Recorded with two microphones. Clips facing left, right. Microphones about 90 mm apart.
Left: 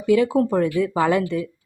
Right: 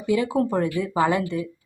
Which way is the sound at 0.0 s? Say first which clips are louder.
Left 4 dB; 10° right (ahead or behind).